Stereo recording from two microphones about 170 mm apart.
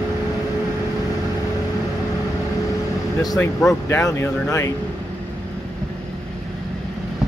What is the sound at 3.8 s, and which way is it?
Speech, 15° left (ahead or behind).